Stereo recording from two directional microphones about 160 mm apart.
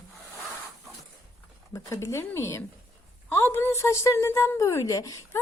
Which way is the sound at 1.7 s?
20° left (ahead or behind).